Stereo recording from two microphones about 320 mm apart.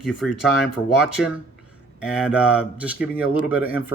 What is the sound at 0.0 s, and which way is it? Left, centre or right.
Speech, centre.